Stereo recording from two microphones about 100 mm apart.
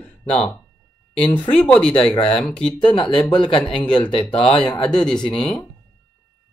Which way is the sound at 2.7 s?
55° left (ahead or behind).